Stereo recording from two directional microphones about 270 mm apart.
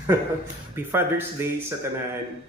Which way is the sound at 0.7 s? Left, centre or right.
Centre.